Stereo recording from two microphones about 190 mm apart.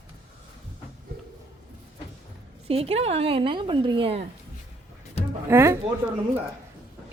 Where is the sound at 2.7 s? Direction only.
30° right (ahead or behind).